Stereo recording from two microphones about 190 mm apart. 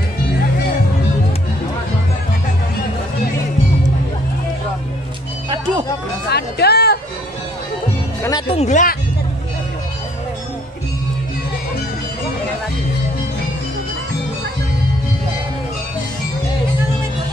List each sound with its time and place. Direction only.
6.3 s music: 55° left (ahead or behind)
8.2 s music: 20° left (ahead or behind)
8.5 s speech: 40° left (ahead or behind)